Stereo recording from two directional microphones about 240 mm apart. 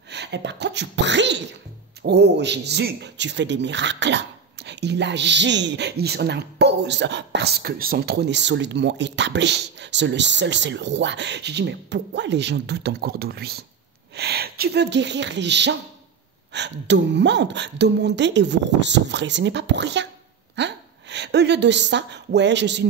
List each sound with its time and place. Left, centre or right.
0.1 s speech: right